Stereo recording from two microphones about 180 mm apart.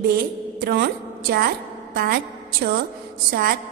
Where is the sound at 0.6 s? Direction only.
60° right (ahead or behind).